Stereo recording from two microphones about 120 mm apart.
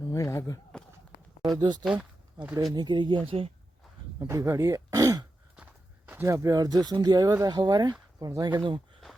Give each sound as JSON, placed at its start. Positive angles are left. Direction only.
{"t": 0.1, "sound": "a sound", "side_deg": 25}
{"t": 1.5, "sound": "speech", "side_deg": -35}
{"t": 1.8, "sound": "speech", "side_deg": -5}
{"t": 2.7, "sound": "speech", "side_deg": -40}
{"t": 3.2, "sound": "speech", "side_deg": -50}
{"t": 4.2, "sound": "speech", "side_deg": -25}
{"t": 5.6, "sound": "walk", "side_deg": -10}
{"t": 6.2, "sound": "speech", "side_deg": -30}